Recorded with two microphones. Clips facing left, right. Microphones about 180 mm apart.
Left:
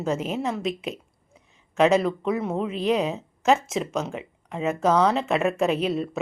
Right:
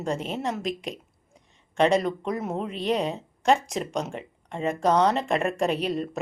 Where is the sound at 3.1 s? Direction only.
5° left (ahead or behind).